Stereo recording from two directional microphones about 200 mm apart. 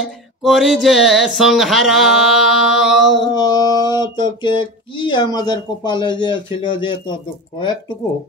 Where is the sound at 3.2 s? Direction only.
20° left (ahead or behind).